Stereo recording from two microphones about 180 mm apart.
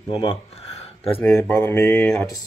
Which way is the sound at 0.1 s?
30° left (ahead or behind).